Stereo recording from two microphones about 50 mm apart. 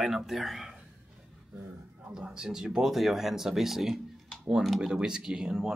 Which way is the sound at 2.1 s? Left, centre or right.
Centre.